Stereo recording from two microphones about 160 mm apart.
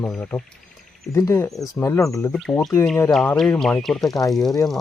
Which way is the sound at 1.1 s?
20° left (ahead or behind).